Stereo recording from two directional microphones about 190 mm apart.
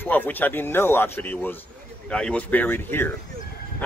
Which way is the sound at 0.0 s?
10° left (ahead or behind).